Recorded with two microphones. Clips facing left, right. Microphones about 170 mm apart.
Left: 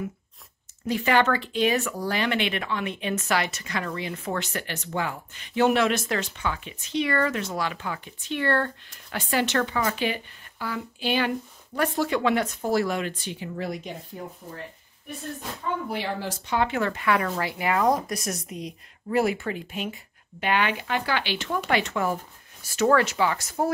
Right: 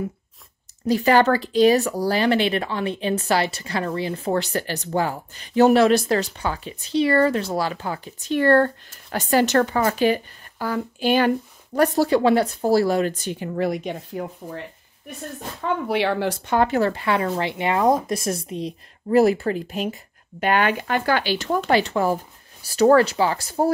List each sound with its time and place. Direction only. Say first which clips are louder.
0.8 s speech: right 5 dB; 35° right (ahead or behind); by 14.2 s 65° right (ahead or behind)
15.6 s speech: right 8 dB; 75° right (ahead or behind); by 23.7 s 30° right (ahead or behind)